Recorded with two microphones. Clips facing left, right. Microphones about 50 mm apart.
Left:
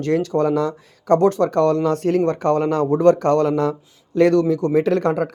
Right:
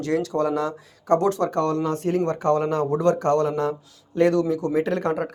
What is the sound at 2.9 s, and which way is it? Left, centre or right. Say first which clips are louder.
Speech: left 7 dB; left.